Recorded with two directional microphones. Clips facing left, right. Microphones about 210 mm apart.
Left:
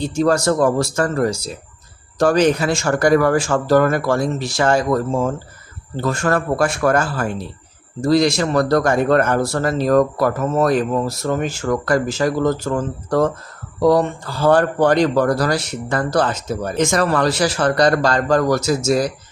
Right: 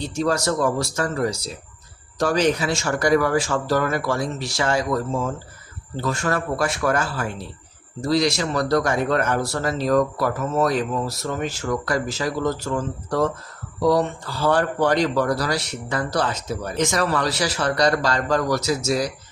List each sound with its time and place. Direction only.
0.2 s speech: 50° left (ahead or behind)